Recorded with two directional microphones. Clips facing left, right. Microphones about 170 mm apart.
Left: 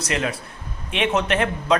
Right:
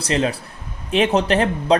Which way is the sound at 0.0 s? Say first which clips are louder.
Right 4 dB; 30° right (ahead or behind).